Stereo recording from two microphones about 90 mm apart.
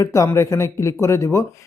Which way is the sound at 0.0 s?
35° left (ahead or behind).